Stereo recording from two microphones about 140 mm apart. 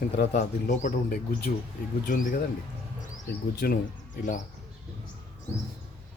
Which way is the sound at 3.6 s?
90° left.